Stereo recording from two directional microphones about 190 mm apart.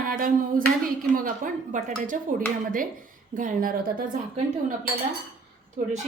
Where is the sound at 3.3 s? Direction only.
45° right (ahead or behind).